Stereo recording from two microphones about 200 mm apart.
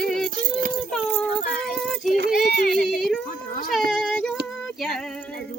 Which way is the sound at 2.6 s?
50° left (ahead or behind).